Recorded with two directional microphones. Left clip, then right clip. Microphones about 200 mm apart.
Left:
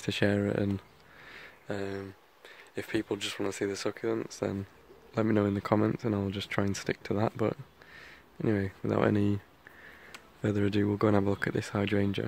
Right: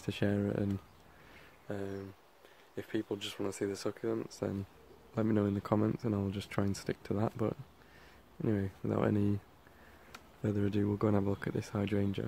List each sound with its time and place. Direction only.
0.0 s speech: 15° left (ahead or behind)
10.4 s speech: 15° left (ahead or behind)